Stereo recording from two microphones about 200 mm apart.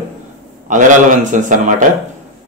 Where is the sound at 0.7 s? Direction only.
40° right (ahead or behind).